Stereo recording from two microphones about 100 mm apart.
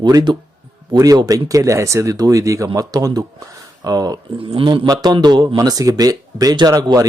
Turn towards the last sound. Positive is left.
turn(degrees=-35)  # may be behind; listen again after turning